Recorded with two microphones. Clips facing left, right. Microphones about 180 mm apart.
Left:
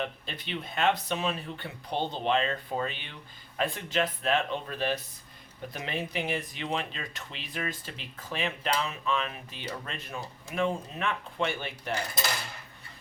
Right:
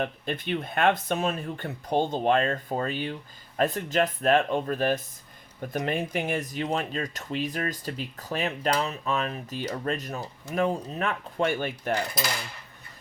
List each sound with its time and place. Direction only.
0.0 s speech: 50° right (ahead or behind)